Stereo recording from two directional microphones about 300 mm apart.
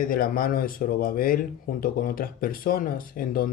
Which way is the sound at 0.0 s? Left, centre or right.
Left.